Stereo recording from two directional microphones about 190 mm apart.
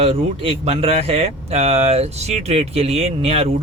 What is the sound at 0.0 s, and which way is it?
Speech, 30° right (ahead or behind).